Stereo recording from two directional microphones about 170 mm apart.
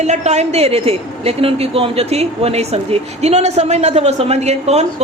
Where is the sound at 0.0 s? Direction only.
40° right (ahead or behind).